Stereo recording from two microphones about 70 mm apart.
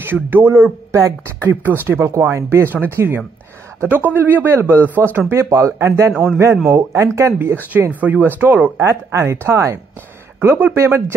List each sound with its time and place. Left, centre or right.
0.0 s a man's voice: right
2.0 s a man's voice: right
3.8 s a man's voice: right
5.3 s speech: right
6.1 s a man's voice: right
8.0 s speech: right
8.8 s speech: right
10.4 s a man's voice: right